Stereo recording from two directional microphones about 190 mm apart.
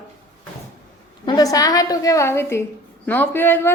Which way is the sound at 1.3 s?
20° left (ahead or behind).